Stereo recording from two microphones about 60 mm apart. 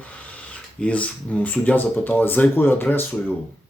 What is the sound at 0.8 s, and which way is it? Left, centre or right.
Speech, left.